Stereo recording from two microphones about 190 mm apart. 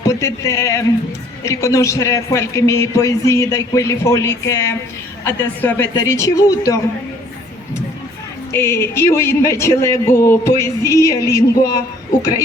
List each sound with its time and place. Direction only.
0.0 s a man's voice: 15° left (ahead or behind)
8.5 s a man's voice: 15° left (ahead or behind)